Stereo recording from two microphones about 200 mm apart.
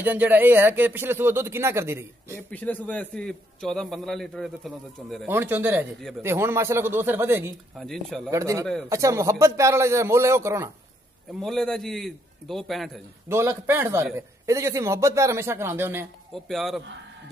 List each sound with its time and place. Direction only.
0.0 s a man's voice: 10° right (ahead or behind)
2.5 s a man's voice: 10° left (ahead or behind)
5.2 s a man's voice: 10° right (ahead or behind)
7.8 s a man's voice: centre (ahead or behind)
8.3 s a man's voice: 15° right (ahead or behind)
11.3 s a man's voice: centre (ahead or behind)
13.3 s a man's voice: 10° right (ahead or behind)
16.4 s a man's voice: centre (ahead or behind)